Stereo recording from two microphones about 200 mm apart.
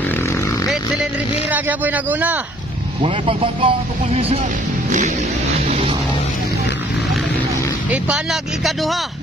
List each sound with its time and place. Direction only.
1.5 s a man's voice: 10° right (ahead or behind)
3.0 s speech: 25° right (ahead or behind)
7.9 s speech: 5° right (ahead or behind)